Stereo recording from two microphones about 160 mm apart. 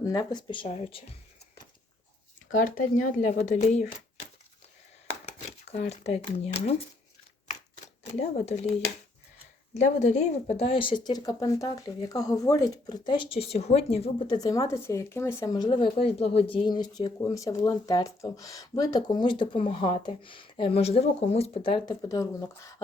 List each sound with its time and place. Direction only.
0.0 s speech: 25° left (ahead or behind)
2.6 s speech: 55° left (ahead or behind)
5.8 s speech: 40° left (ahead or behind)
8.4 s speech: 45° left (ahead or behind)
14.3 s speech: 20° left (ahead or behind)